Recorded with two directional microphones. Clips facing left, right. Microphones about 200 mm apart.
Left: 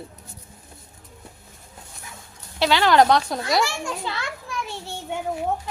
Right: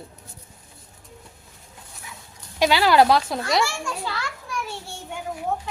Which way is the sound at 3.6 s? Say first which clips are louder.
Even; 20° left (ahead or behind).